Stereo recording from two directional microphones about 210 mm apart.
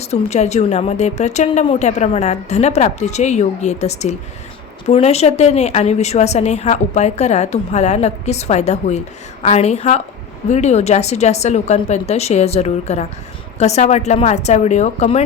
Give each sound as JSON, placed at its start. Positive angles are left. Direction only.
{"t": 0.0, "sound": "a woman's voice", "side_deg": 30}